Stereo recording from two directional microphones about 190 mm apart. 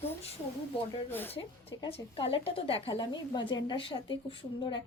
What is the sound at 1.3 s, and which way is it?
A woman's voice, 30° left (ahead or behind).